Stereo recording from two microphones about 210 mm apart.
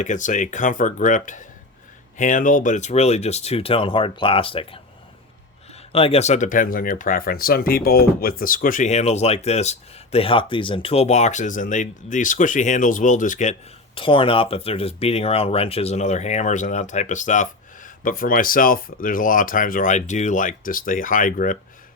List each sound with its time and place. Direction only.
0.0 s speech: 35° left (ahead or behind)
5.9 s speech: 25° left (ahead or behind)